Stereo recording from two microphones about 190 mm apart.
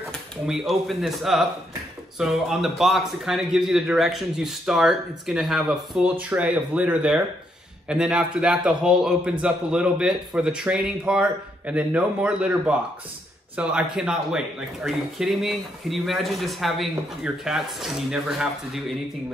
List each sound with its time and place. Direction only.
0.1 s a man's voice: centre (ahead or behind)